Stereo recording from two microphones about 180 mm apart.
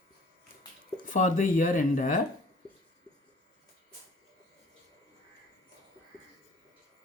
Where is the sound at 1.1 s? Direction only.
45° left (ahead or behind).